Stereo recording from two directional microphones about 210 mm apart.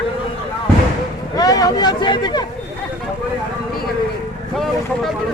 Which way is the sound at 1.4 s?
15° left (ahead or behind).